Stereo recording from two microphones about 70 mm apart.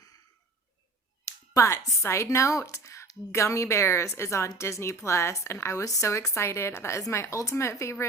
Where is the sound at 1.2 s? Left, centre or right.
Left.